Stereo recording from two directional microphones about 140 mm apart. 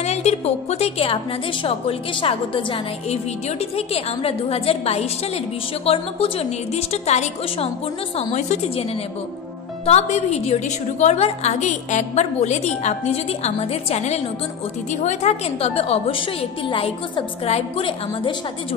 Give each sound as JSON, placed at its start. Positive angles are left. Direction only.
{"t": 0.0, "sound": "music", "side_deg": 50}
{"t": 1.6, "sound": "a woman's voice", "side_deg": 40}
{"t": 9.8, "sound": "a woman's voice", "side_deg": 50}